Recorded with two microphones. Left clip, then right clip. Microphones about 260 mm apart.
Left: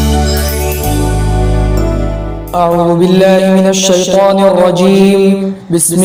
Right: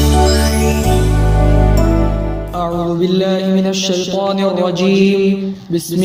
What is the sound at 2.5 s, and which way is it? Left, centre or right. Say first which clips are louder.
A man's voice: left 10 dB; left.